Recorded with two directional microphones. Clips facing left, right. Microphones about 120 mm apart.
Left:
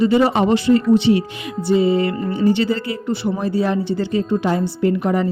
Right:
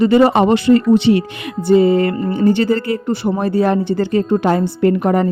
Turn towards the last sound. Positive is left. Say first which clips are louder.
# right 4 dB
turn(degrees=-50)  # may be behind; listen again after turning